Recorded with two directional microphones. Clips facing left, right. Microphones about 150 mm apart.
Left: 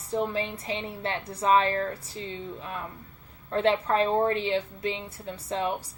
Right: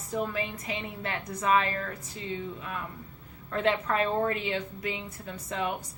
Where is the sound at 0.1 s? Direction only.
30° left (ahead or behind).